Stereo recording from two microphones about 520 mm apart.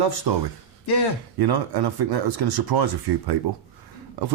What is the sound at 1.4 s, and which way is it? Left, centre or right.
Speech, right.